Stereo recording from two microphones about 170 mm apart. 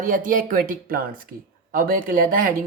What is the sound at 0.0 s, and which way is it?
Speech, 50° right (ahead or behind).